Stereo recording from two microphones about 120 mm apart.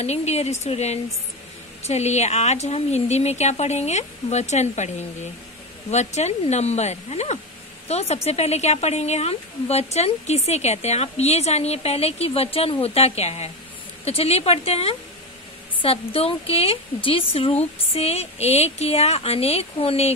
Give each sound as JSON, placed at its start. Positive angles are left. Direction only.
{"t": 0.0, "sound": "a woman's voice", "side_deg": 65}